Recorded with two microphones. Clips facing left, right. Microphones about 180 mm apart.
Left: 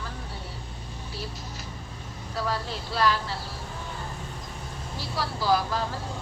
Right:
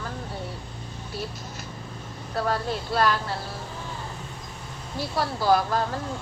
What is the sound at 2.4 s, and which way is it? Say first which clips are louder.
Vehicle: right 4 dB; 55° right (ahead or behind).